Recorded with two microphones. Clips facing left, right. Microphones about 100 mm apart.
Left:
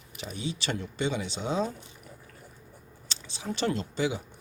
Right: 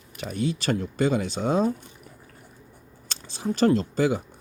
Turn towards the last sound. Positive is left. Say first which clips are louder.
# right 7 dB
turn(degrees=-45)  # may be behind; listen again after turning